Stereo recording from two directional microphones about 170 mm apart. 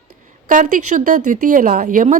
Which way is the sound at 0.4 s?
50° right (ahead or behind).